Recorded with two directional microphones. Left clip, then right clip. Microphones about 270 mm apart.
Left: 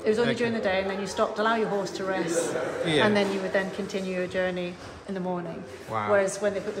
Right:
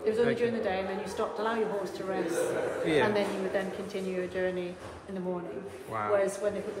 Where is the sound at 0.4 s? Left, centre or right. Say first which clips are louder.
Left 4 dB; left.